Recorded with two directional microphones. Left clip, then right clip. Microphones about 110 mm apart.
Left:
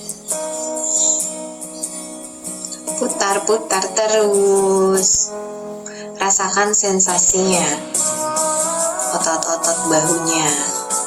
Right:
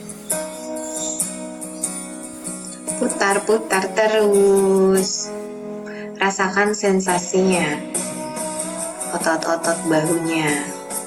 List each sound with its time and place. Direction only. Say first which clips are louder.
0.3 s music: left 4 dB; 20° left (ahead or behind)
3.0 s speech: even; 15° left (ahead or behind)
6.1 s music: left 1 dB; 15° left (ahead or behind)
9.0 s music: left 2 dB; 20° left (ahead or behind)